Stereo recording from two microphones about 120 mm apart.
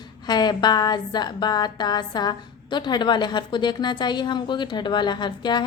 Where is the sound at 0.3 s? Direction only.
35° left (ahead or behind).